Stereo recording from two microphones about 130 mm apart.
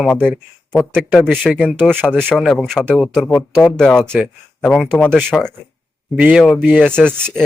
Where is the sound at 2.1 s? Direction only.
15° right (ahead or behind).